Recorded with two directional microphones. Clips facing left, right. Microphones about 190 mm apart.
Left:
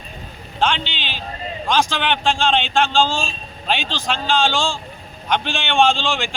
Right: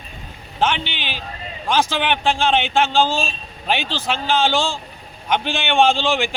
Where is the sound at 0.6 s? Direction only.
15° right (ahead or behind).